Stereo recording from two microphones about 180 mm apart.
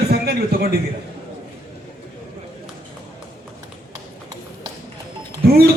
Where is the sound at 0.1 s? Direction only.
60° right (ahead or behind).